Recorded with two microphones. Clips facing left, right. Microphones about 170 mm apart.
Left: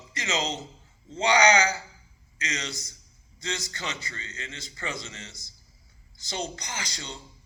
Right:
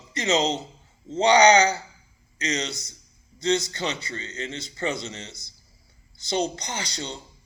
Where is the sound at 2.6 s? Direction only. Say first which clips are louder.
Right 3 dB; 70° right (ahead or behind).